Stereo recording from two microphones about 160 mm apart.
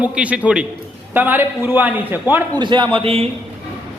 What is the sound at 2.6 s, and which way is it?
Speech, 30° right (ahead or behind).